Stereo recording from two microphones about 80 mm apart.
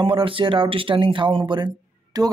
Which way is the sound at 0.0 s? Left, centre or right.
Right.